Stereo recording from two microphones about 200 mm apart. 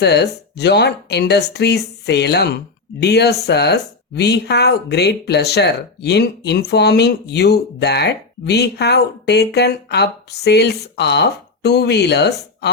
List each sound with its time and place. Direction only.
0.0 s speech: 55° left (ahead or behind)